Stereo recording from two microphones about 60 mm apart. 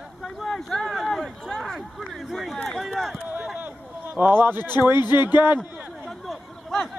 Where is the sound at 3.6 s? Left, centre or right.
Right.